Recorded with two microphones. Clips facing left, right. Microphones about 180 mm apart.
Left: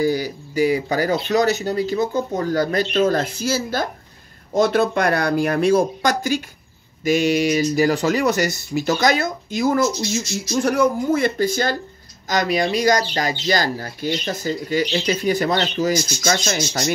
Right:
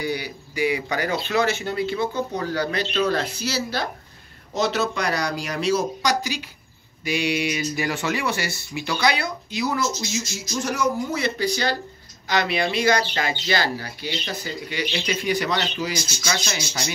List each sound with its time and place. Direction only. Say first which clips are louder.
0.0 s speech: left 7 dB; 40° left (ahead or behind)